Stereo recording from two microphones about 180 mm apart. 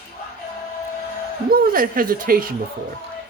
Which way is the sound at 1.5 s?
55° right (ahead or behind).